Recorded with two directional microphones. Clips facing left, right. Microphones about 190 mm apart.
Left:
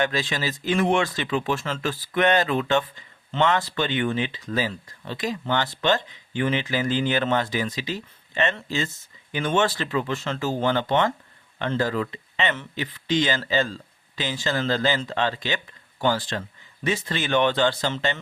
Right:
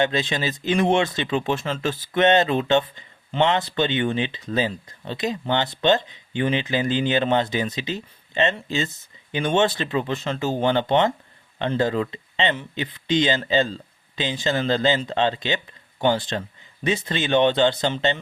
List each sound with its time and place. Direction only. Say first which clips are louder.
0.0 s speech: right 3 dB; 20° right (ahead or behind)